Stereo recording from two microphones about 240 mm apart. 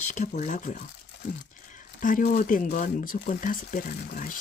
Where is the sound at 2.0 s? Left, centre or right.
Left.